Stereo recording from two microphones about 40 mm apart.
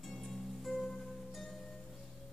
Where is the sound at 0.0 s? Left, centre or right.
Centre.